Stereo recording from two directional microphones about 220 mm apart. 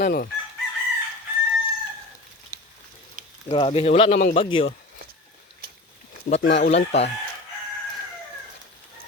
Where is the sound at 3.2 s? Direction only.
35° right (ahead or behind).